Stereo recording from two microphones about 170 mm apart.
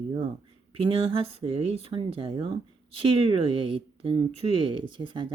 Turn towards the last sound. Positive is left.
turn(degrees=-30)  # may be behind; listen again after turning